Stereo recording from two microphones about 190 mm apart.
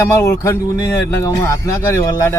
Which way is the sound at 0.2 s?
15° left (ahead or behind).